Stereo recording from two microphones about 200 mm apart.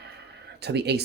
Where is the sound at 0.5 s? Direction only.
55° right (ahead or behind).